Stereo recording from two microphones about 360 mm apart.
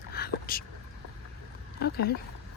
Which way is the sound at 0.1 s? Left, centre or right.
Left.